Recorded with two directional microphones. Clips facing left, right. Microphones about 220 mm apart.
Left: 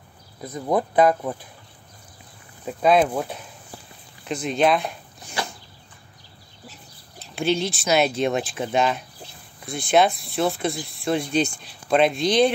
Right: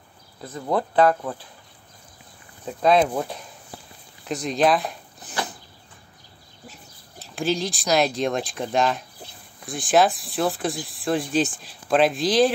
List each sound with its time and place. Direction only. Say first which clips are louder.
0.4 s speech: left 2 dB; 15° left (ahead or behind)
2.6 s speech: left 1 dB; 5° left (ahead or behind)
7.3 s speech: left 2 dB; centre (ahead or behind)